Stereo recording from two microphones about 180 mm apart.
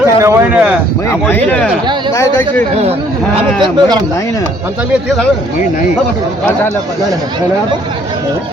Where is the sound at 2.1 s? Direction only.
15° left (ahead or behind).